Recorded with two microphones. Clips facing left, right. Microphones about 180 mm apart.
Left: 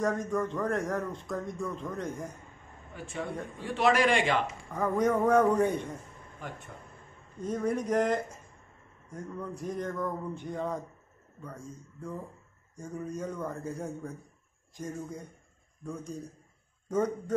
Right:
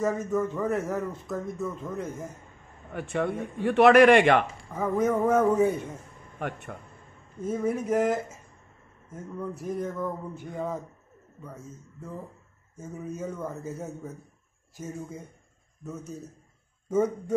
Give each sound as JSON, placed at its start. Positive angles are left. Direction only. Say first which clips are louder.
{"t": 0.0, "sound": "a man's voice", "louder": "right 3 dB", "side_deg": -5}
{"t": 2.9, "sound": "a man's voice", "louder": "right 8 dB", "side_deg": -65}
{"t": 4.7, "sound": "a man's voice", "louder": "right 2 dB", "side_deg": -5}
{"t": 6.4, "sound": "speech", "louder": "right 8 dB", "side_deg": -65}
{"t": 7.4, "sound": "a man's voice", "louder": "right 2 dB", "side_deg": -5}
{"t": 12.7, "sound": "a man's voice", "louder": "even", "side_deg": -5}